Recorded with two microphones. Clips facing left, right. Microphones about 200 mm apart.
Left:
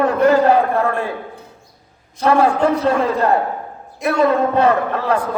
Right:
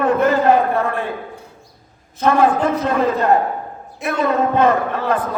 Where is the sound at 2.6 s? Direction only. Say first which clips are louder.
Left 3 dB; 35° left (ahead or behind).